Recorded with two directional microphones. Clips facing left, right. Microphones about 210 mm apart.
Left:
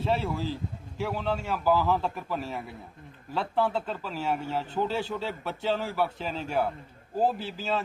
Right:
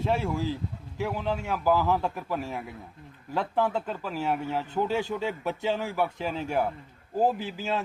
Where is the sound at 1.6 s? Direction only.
15° right (ahead or behind).